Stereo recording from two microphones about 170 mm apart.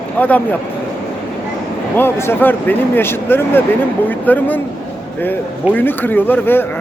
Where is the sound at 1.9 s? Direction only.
15° left (ahead or behind).